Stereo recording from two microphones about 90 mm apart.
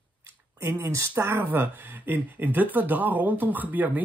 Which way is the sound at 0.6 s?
30° right (ahead or behind).